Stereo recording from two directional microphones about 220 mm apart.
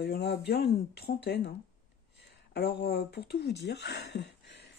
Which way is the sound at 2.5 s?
50° left (ahead or behind).